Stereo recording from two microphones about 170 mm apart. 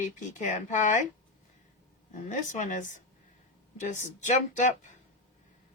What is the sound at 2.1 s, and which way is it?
Speech, 45° left (ahead or behind).